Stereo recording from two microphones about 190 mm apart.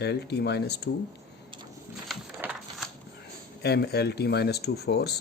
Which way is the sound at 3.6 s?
60° left (ahead or behind).